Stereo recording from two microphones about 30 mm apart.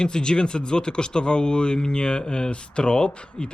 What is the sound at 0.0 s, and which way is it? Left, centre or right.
Speech, left.